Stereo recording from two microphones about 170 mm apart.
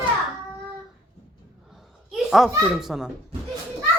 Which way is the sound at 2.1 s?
Centre (ahead or behind).